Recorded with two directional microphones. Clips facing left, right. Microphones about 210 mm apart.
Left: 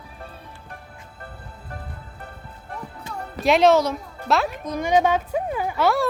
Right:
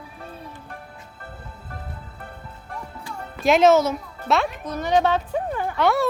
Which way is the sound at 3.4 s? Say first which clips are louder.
Right 1 dB; centre (ahead or behind).